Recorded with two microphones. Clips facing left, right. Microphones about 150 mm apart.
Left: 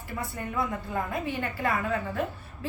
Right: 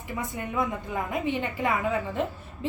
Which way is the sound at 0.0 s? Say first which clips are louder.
Right 2 dB; 15° right (ahead or behind).